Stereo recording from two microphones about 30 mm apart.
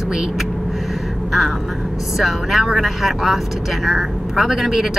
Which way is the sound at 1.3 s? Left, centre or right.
Centre.